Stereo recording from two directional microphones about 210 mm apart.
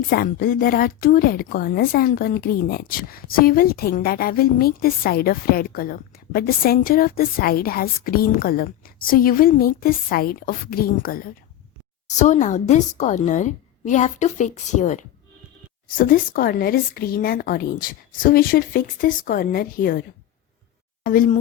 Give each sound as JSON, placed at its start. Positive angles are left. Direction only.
{"t": 0.1, "sound": "a woman's voice", "side_deg": 45}
{"t": 21.0, "sound": "a woman's voice", "side_deg": 40}